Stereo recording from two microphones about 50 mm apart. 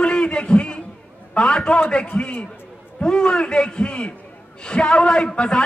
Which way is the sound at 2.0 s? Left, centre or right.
Left.